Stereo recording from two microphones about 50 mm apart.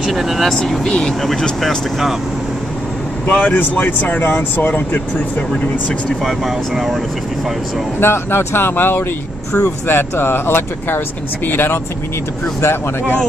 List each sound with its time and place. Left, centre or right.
0.0 s speech: centre
0.8 s speech: centre
1.2 s speech: centre
3.3 s speech: left
3.5 s speech: left
6.2 s speech: centre
8.0 s speech: left